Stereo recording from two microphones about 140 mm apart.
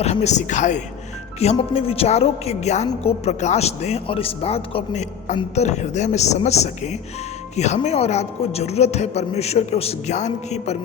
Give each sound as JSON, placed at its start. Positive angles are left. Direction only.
{"t": 0.0, "sound": "speech", "side_deg": 55}
{"t": 1.4, "sound": "a woman's voice", "side_deg": 50}